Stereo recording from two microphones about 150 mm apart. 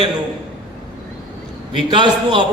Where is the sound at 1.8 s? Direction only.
30° right (ahead or behind).